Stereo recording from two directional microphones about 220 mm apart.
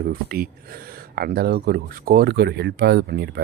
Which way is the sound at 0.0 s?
40° right (ahead or behind).